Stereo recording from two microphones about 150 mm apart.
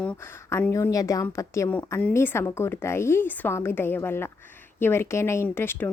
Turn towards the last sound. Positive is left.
turn(degrees=15)  # may be behind; listen again after turning